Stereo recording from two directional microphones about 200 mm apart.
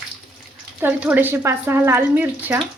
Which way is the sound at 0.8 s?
10° right (ahead or behind).